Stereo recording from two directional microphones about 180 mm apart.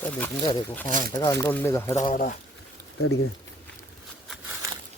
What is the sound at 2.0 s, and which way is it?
Speech, 50° left (ahead or behind).